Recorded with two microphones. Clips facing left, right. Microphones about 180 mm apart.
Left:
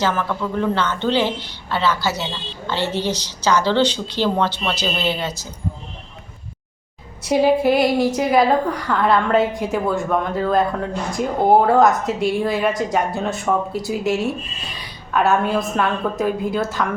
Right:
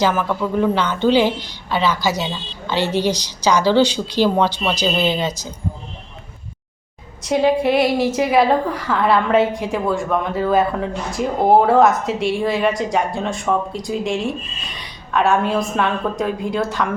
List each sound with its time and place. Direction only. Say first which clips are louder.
0.0 s a woman's voice: right 3 dB; 10° right (ahead or behind)
7.2 s a woman's voice: left 1 dB; 5° left (ahead or behind)